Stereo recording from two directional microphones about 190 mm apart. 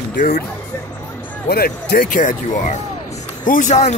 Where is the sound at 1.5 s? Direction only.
55° left (ahead or behind).